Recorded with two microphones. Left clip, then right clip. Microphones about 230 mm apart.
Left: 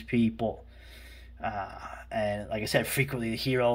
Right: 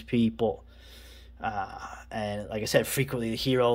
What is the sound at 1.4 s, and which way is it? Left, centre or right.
Speech, right.